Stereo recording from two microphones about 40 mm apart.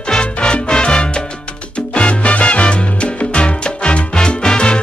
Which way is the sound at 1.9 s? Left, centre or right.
Left.